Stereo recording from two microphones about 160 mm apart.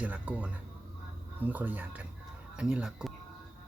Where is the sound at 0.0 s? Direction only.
10° right (ahead or behind).